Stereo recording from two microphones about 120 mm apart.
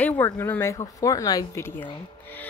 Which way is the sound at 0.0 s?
15° left (ahead or behind).